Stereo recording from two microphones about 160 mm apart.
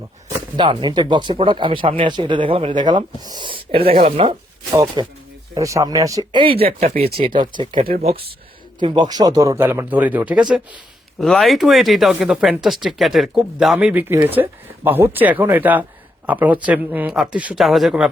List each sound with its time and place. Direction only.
0.5 s speech: 30° right (ahead or behind)
4.7 s speech: 20° right (ahead or behind); by 6.9 s 40° right (ahead or behind)
7.2 s speech: 30° right (ahead or behind)
8.8 s speech: 25° right (ahead or behind); by 10.4 s 10° right (ahead or behind)
11.2 s speech: centre (ahead or behind)